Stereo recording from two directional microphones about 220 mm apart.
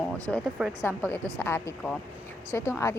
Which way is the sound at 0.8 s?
10° left (ahead or behind).